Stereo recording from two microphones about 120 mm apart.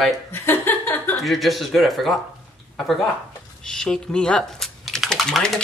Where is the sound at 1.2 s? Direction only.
Centre (ahead or behind).